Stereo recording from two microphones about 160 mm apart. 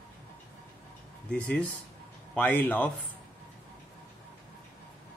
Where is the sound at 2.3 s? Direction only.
10° left (ahead or behind).